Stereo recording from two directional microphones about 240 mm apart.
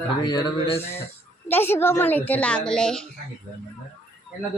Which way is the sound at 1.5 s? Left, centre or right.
Centre.